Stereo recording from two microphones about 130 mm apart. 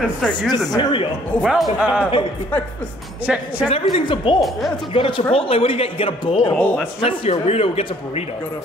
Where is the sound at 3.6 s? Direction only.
45° left (ahead or behind).